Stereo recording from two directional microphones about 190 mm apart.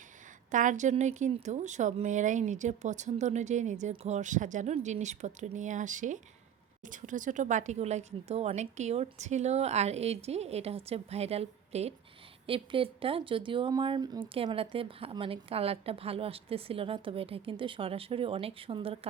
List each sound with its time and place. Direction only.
0.5 s a woman's voice: 40° right (ahead or behind)